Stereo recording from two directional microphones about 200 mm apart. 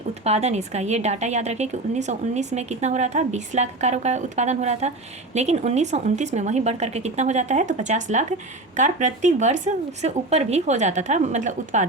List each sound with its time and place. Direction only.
0.3 s a woman's voice: 35° right (ahead or behind)